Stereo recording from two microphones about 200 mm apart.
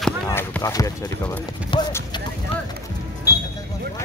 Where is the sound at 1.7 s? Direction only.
25° left (ahead or behind).